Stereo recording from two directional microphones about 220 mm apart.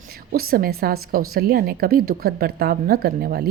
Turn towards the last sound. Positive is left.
turn(degrees=-45)  # may be behind; listen again after turning